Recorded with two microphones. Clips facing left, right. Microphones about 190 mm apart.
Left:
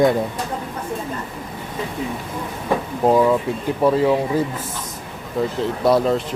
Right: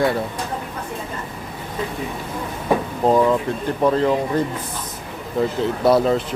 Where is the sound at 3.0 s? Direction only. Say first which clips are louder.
Left 1 dB; 5° left (ahead or behind).